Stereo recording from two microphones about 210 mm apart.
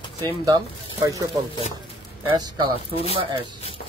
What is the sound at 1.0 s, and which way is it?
Speech, 15° right (ahead or behind).